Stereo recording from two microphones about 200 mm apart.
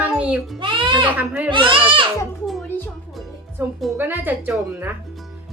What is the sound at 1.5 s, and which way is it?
Speech, 25° right (ahead or behind).